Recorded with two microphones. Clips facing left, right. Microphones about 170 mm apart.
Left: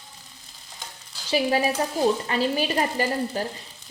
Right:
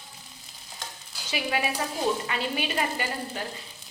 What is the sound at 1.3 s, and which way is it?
A woman's voice, 35° left (ahead or behind).